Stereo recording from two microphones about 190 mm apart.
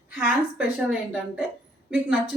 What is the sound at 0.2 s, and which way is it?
A woman's voice, 5° right (ahead or behind).